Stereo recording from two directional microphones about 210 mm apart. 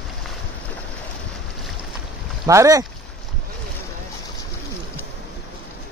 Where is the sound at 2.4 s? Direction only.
15° right (ahead or behind).